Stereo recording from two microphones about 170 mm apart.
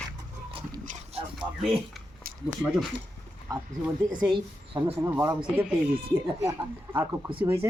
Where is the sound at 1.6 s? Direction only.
Centre (ahead or behind).